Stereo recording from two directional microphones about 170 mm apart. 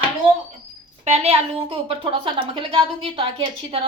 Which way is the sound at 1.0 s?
40° right (ahead or behind).